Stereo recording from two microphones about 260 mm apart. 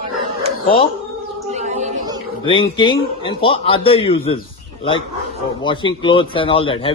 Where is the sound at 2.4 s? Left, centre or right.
Centre.